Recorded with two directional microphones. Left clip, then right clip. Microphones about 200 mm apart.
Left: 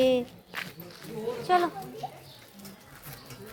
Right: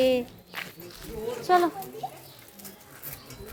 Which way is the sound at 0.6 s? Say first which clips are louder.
Even; 15° left (ahead or behind).